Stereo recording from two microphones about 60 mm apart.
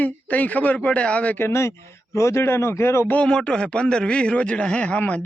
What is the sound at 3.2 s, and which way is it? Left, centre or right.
A man's voice, centre.